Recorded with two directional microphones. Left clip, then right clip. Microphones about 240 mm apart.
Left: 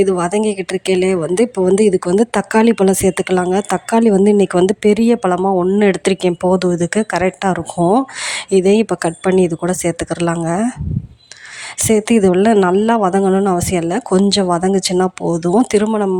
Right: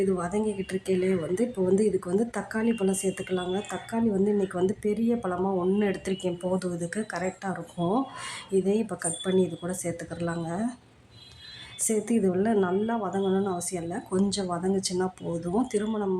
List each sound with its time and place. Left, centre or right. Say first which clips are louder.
0.0 s a woman's voice: left 13 dB; left
11.9 s a woman's voice: left 14 dB; left